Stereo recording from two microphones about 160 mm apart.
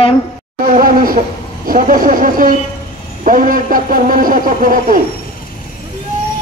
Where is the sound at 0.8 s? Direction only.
60° right (ahead or behind).